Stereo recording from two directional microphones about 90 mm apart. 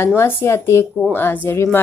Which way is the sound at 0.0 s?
30° left (ahead or behind).